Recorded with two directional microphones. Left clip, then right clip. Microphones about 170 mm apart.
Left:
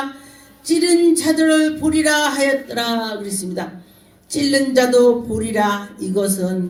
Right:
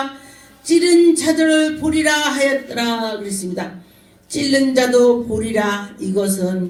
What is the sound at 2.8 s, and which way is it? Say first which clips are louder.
Speech: even; 40° left (ahead or behind).